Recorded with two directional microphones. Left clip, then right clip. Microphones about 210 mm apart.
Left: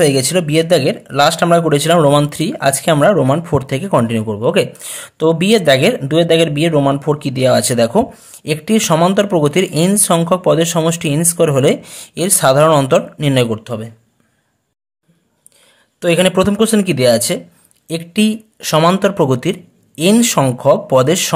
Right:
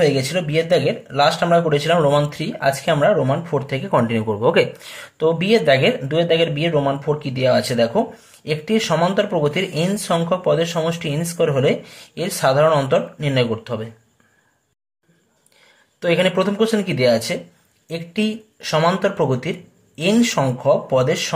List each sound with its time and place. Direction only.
0.0 s speech: 35° left (ahead or behind)
16.0 s speech: 35° left (ahead or behind)